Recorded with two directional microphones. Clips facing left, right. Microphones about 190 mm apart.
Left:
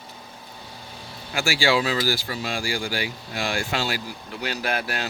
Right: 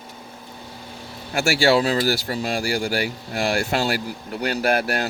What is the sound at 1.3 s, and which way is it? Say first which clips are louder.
Speech: right 4 dB; 40° right (ahead or behind).